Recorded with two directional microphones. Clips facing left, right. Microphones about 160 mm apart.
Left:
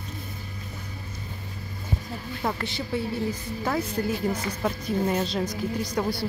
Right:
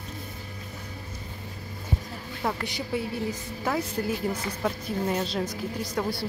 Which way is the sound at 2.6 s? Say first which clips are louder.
Left 1 dB; 15° right (ahead or behind).